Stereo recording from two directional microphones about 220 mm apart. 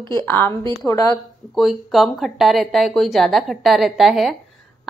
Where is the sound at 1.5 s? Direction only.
Centre (ahead or behind).